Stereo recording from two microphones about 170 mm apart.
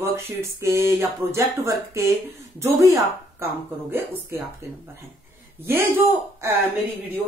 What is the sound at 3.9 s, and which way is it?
Speech, 15° right (ahead or behind).